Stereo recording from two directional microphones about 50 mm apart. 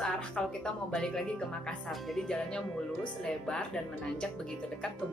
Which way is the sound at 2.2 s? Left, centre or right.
Centre.